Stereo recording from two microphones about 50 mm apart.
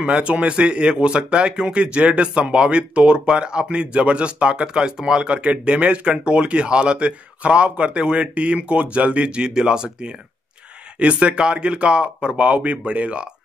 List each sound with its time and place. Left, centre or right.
0.0 s speech: right